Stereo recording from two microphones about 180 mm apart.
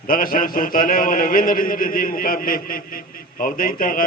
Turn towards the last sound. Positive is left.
turn(degrees=50)  # may be behind; listen again after turning